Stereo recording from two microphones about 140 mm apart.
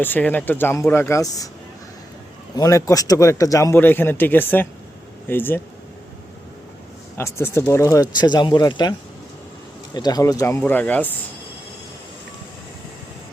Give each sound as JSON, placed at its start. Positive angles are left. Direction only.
{"t": 0.0, "sound": "speech", "side_deg": 15}
{"t": 2.6, "sound": "a man's voice", "side_deg": 25}
{"t": 7.2, "sound": "a man's voice", "side_deg": 20}
{"t": 10.6, "sound": "speech", "side_deg": 10}